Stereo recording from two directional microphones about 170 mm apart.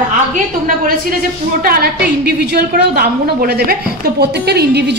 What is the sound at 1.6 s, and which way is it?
Speech, 65° right (ahead or behind).